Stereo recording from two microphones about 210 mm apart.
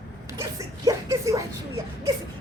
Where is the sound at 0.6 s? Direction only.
15° right (ahead or behind).